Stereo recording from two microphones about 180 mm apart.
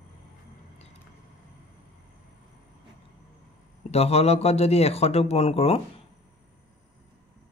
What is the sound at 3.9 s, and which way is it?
Speech, 35° left (ahead or behind).